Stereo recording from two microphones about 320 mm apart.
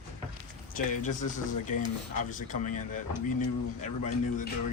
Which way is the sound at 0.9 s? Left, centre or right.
Left.